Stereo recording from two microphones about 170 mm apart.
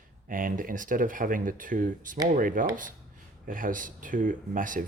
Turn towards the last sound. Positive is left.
turn(degrees=-55)  # may be behind; listen again after turning